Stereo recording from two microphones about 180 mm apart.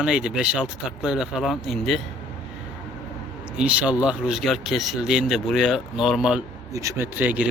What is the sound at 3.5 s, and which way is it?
Speech, 5° right (ahead or behind).